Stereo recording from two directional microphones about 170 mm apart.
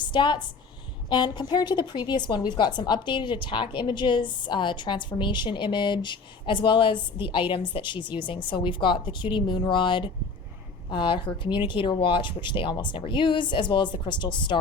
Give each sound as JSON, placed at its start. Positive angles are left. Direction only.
{"t": 0.0, "sound": "a woman's voice", "side_deg": 25}